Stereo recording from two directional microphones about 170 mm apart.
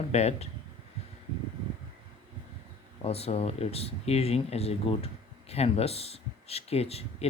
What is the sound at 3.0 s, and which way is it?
Speech, 35° left (ahead or behind).